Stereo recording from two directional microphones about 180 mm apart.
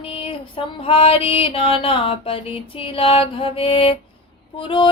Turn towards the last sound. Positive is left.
turn(degrees=30)  # may be behind; listen again after turning